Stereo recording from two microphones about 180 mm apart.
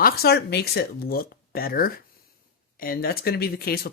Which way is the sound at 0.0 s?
60° left (ahead or behind).